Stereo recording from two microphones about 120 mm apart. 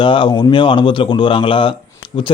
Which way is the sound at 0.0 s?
40° left (ahead or behind).